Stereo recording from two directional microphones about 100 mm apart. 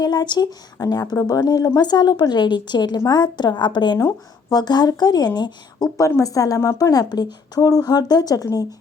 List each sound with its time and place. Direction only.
0.0 s a woman's voice: 45° left (ahead or behind)
6.0 s a woman's voice: 30° left (ahead or behind)